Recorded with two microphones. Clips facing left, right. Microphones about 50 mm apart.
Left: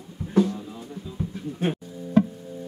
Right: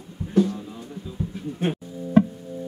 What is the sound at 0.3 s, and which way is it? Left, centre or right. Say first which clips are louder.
Music: right 1 dB; centre.